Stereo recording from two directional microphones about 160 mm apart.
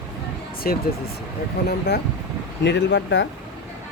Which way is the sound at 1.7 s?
90° left.